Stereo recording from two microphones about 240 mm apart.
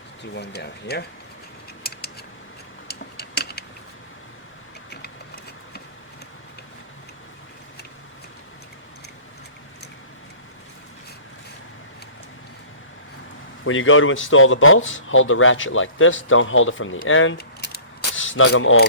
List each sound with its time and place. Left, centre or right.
0.3 s speech: left
1.8 s scissors: left
2.8 s a sound: left
13.7 s speech: left
17.3 s keys jangling: left
18.2 s speech: left